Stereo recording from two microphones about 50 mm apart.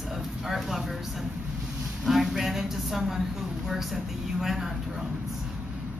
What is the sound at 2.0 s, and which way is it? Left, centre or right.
A man's voice, centre.